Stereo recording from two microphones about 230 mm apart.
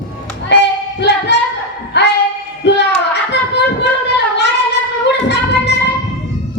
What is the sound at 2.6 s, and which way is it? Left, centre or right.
Child singing, left.